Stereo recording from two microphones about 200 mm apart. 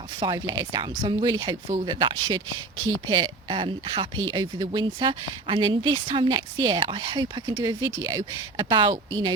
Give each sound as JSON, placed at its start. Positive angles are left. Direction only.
{"t": 0.2, "sound": "speech", "side_deg": -20}